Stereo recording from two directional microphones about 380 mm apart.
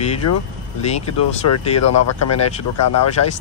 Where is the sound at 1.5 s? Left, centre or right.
Left.